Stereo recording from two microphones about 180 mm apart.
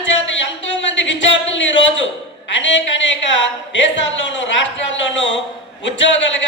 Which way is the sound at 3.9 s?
90° left.